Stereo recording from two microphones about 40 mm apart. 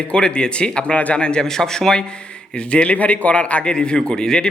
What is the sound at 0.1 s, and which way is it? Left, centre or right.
A man's voice, left.